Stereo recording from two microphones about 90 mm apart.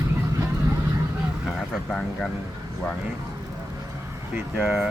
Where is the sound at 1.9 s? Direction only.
5° left (ahead or behind).